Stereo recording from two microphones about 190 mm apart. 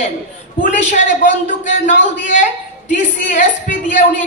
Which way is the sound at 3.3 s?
40° left (ahead or behind).